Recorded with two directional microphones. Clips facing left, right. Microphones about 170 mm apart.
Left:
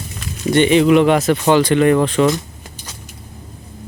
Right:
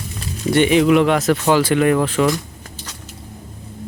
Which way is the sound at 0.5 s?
5° right (ahead or behind).